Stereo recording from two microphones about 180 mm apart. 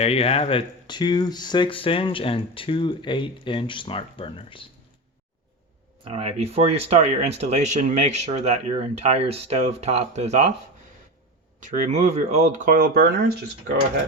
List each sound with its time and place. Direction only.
0.0 s speech: 35° left (ahead or behind)
6.1 s speech: 35° right (ahead or behind)
11.6 s speech: 40° right (ahead or behind)